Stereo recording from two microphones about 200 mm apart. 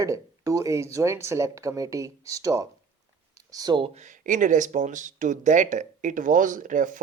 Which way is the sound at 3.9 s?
40° right (ahead or behind).